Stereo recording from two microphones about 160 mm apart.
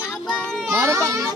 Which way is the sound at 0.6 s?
15° right (ahead or behind).